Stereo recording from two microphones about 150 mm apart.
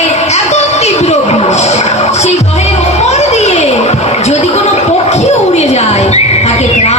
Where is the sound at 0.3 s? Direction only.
45° left (ahead or behind).